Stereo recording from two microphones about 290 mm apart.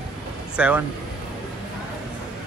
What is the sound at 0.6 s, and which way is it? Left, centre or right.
Speech, centre.